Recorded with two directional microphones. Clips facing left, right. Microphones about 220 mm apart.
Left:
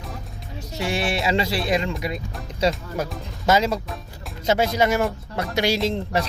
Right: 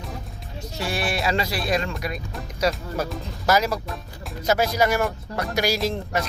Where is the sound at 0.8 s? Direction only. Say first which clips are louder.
Left 2 dB; 25° left (ahead or behind).